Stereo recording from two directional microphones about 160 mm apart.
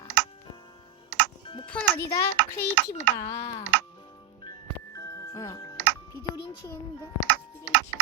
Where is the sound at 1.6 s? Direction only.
10° left (ahead or behind).